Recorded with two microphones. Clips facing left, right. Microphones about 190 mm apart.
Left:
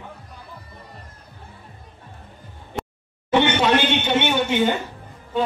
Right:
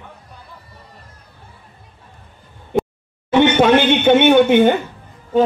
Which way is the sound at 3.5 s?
55° right (ahead or behind).